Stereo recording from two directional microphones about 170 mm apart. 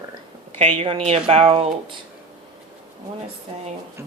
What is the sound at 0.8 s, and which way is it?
Speech, 35° right (ahead or behind).